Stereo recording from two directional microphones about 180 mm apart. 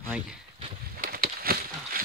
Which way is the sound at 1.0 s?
55° right (ahead or behind).